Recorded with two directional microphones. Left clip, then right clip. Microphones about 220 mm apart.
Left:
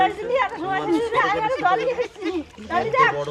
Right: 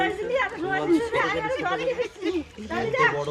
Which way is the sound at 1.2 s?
30° left (ahead or behind).